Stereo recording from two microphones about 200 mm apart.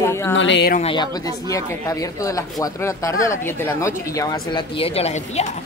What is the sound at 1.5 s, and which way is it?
Speech, 15° left (ahead or behind).